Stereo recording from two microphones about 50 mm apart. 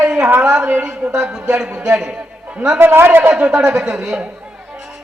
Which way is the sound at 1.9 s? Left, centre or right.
Centre.